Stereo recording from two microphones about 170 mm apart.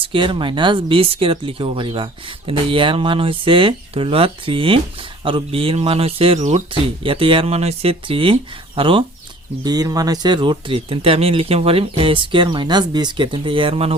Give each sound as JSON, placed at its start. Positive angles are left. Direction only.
{"t": 0.0, "sound": "speech", "side_deg": -30}